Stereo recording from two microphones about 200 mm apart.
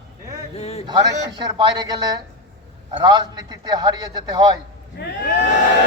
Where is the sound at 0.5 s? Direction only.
30° left (ahead or behind).